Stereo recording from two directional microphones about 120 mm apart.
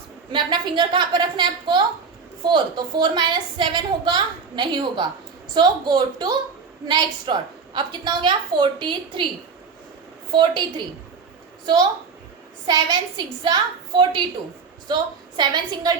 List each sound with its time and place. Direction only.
0.3 s a woman's voice: 40° right (ahead or behind)
10.3 s a woman's voice: 40° right (ahead or behind)
11.6 s a woman's voice: 35° right (ahead or behind)